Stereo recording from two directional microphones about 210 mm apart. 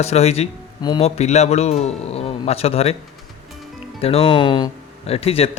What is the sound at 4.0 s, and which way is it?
Speech, 30° left (ahead or behind).